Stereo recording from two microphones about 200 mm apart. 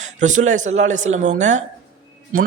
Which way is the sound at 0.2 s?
40° right (ahead or behind).